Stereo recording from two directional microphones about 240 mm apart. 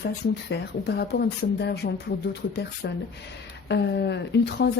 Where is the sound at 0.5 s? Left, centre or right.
Left.